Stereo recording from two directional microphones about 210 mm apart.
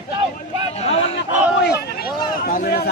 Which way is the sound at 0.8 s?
30° left (ahead or behind).